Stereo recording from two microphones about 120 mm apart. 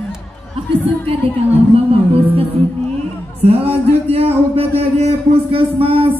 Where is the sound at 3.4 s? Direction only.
55° right (ahead or behind).